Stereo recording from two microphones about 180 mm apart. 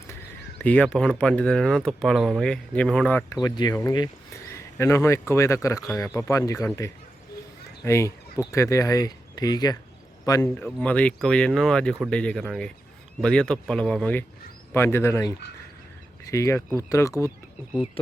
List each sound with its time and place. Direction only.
0.6 s speech: 5° left (ahead or behind)
10.6 s speech: 5° left (ahead or behind)
18.0 s speech: 30° left (ahead or behind)